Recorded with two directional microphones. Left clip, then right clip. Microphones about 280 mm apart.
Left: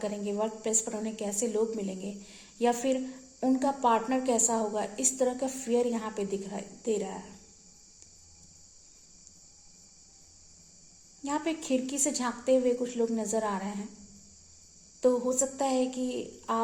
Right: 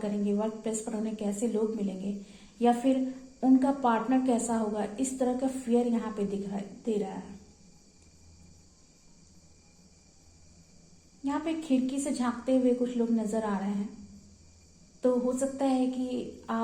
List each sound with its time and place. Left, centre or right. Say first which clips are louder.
0.0 s a woman's voice: even; left
11.2 s a woman's voice: even; left
15.0 s a woman's voice: left 1 dB; left